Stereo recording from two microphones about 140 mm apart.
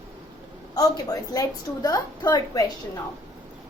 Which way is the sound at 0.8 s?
25° left (ahead or behind).